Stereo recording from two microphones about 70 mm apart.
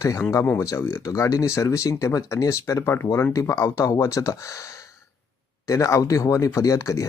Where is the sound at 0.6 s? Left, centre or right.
Left.